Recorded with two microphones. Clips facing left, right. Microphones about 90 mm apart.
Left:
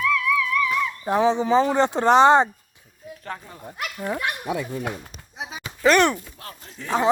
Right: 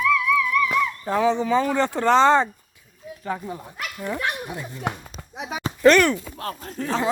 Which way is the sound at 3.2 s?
10° right (ahead or behind).